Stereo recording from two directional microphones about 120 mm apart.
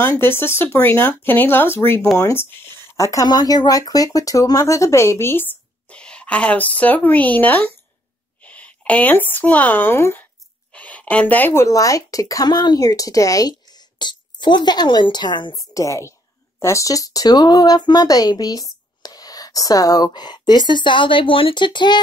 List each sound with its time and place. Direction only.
0.0 s speech: 20° left (ahead or behind); by 15.6 s 35° left (ahead or behind)
15.7 s speech: 25° left (ahead or behind)